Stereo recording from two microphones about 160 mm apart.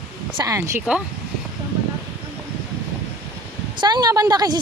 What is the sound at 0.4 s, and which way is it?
Speech, 20° right (ahead or behind).